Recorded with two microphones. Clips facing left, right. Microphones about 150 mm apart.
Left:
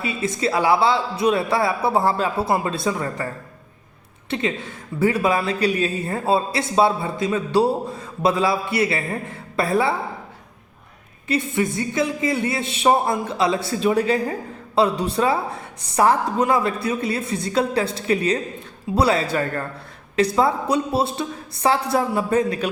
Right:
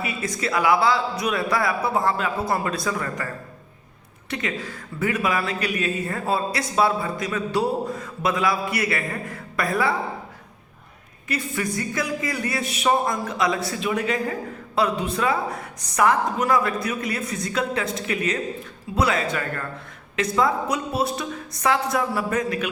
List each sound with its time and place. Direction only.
0.0 s a man's voice: 25° left (ahead or behind)
4.3 s a man's voice: 25° left (ahead or behind)
11.3 s a man's voice: 25° left (ahead or behind)